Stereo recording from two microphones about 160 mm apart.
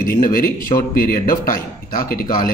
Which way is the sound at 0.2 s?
65° left (ahead or behind).